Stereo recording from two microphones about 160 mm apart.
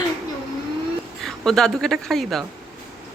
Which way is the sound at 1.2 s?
Centre (ahead or behind).